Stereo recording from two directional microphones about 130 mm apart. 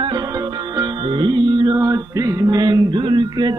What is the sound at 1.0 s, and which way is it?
Mantra, 40° right (ahead or behind).